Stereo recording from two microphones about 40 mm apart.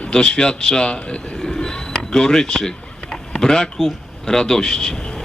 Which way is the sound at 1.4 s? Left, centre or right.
Centre.